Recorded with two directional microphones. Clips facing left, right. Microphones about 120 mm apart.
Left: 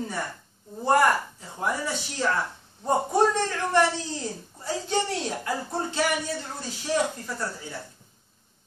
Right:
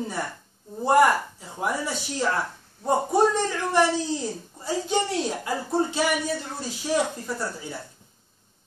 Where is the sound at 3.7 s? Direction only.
15° right (ahead or behind).